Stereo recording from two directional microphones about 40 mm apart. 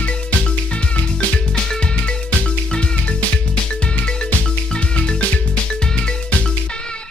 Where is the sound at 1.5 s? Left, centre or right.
Centre.